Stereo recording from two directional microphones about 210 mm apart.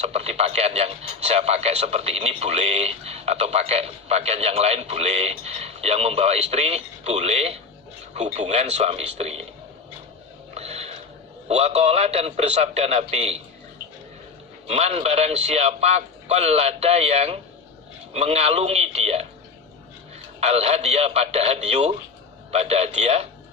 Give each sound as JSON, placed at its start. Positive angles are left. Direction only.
{"t": 0.0, "sound": "a man's voice", "side_deg": -30}
{"t": 10.5, "sound": "a sound", "side_deg": -30}
{"t": 11.4, "sound": "a man's voice", "side_deg": -30}
{"t": 14.7, "sound": "a man's voice", "side_deg": -30}
{"t": 20.4, "sound": "a man's voice", "side_deg": -30}